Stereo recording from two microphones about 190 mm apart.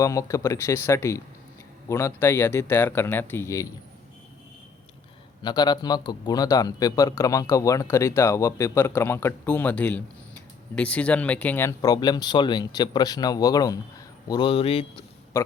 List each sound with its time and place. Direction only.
0.0 s speech: 15° left (ahead or behind)
5.4 s speech: 20° left (ahead or behind)